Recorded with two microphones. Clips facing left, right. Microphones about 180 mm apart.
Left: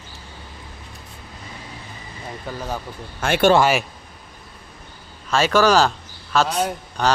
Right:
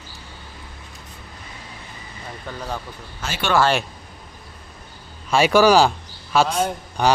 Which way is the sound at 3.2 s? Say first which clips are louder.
Left 10 dB; 55° left (ahead or behind).